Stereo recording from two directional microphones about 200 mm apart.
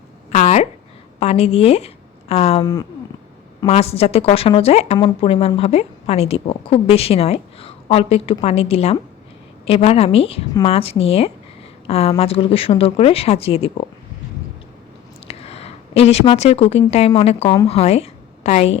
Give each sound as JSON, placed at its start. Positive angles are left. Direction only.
{"t": 0.3, "sound": "a sound", "side_deg": 35}
{"t": 1.2, "sound": "a woman's voice", "side_deg": 30}
{"t": 3.7, "sound": "a woman's voice", "side_deg": 30}
{"t": 15.3, "sound": "a woman's voice", "side_deg": 30}